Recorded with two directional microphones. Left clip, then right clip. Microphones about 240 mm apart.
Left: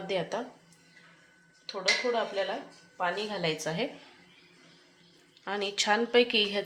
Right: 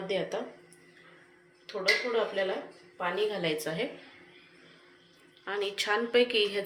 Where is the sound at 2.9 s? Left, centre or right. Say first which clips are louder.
Right 1 dB; left.